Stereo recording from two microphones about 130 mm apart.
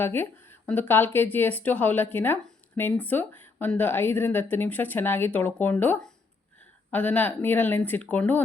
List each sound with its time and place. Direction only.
0.0 s a woman's voice: 15° left (ahead or behind)